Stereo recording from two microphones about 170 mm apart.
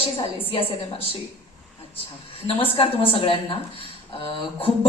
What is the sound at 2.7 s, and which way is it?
Speech, 35° left (ahead or behind).